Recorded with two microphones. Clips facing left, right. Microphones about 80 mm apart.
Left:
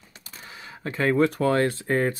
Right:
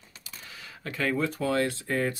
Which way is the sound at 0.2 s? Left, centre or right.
Left.